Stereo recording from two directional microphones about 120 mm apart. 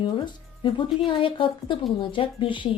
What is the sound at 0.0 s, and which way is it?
Speech, 45° left (ahead or behind).